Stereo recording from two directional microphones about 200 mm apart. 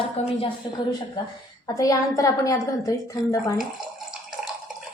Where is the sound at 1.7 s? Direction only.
15° left (ahead or behind).